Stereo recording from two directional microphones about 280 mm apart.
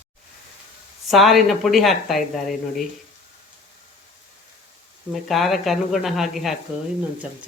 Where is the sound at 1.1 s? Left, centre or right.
Centre.